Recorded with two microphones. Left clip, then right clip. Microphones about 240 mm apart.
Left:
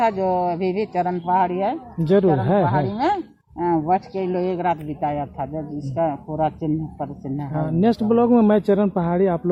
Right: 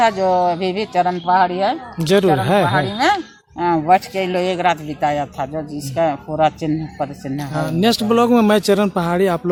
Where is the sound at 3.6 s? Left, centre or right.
Right.